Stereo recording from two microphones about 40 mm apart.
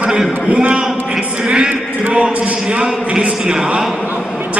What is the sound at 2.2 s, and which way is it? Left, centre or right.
A man's voice, right.